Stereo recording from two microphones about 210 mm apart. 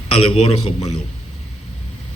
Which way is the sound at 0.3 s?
25° left (ahead or behind).